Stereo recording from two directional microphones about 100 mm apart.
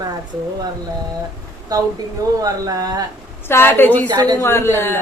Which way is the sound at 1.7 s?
40° right (ahead or behind).